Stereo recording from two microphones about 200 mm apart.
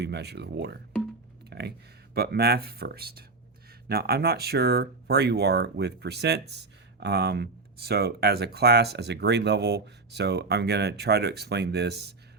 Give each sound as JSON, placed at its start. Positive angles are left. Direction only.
{"t": 0.0, "sound": "speech", "side_deg": -55}
{"t": 1.5, "sound": "a sound", "side_deg": -55}
{"t": 2.1, "sound": "speech", "side_deg": -55}